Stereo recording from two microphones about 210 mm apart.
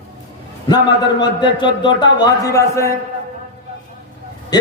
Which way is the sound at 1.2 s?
20° left (ahead or behind).